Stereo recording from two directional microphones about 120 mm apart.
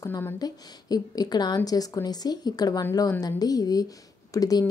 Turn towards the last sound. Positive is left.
turn(degrees=30)  # may be behind; listen again after turning